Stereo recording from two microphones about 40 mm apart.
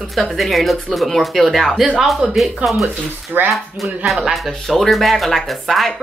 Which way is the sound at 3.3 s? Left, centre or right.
Right.